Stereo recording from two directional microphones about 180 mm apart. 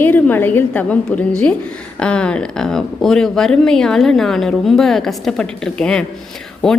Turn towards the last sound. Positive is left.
turn(degrees=5)  # may be behind; listen again after turning